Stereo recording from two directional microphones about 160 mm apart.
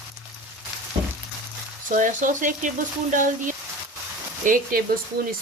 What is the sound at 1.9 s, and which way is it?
Speech, 55° right (ahead or behind).